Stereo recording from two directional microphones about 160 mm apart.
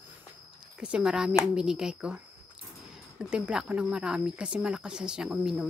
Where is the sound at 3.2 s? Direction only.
5° right (ahead or behind).